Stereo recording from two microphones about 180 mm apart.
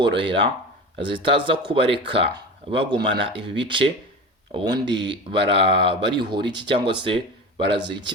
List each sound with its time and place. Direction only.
0.1 s speech: 30° right (ahead or behind)